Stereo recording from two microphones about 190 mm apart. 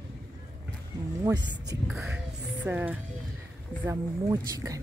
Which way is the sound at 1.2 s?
20° right (ahead or behind).